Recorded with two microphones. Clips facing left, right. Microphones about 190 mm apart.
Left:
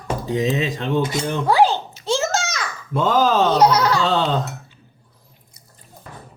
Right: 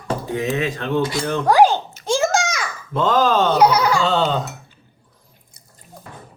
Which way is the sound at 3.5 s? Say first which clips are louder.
Even; 10° right (ahead or behind).